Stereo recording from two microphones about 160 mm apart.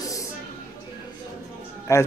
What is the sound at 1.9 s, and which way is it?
Speech, 20° left (ahead or behind).